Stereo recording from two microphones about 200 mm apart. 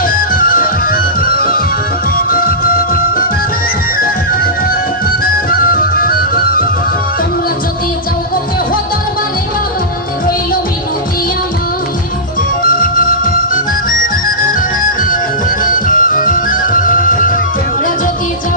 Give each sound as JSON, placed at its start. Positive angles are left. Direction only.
{"t": 0.2, "sound": "music", "side_deg": 45}
{"t": 5.2, "sound": "music", "side_deg": 45}
{"t": 12.8, "sound": "music", "side_deg": 45}
{"t": 15.9, "sound": "music", "side_deg": 40}